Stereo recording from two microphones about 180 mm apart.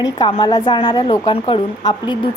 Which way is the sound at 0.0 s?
25° left (ahead or behind).